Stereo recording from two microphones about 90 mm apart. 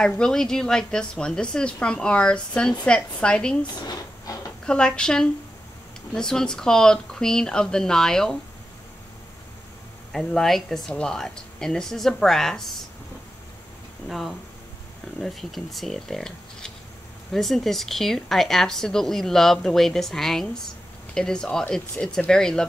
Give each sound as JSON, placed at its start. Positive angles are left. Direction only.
{"t": 0.0, "sound": "a woman's voice", "side_deg": 5}
{"t": 3.8, "sound": "a sound", "side_deg": 40}
{"t": 4.6, "sound": "a woman's voice", "side_deg": 10}
{"t": 10.1, "sound": "a woman's voice", "side_deg": 5}
{"t": 14.0, "sound": "a woman's voice", "side_deg": 0}